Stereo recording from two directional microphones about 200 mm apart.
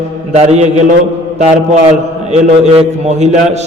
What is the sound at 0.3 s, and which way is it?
Speech, 35° right (ahead or behind).